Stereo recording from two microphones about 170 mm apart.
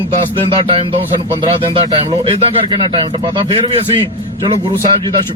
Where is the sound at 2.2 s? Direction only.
35° right (ahead or behind).